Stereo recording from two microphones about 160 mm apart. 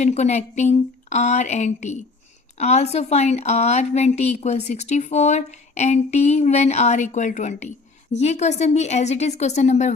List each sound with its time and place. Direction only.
0.0 s a woman's voice: 45° left (ahead or behind)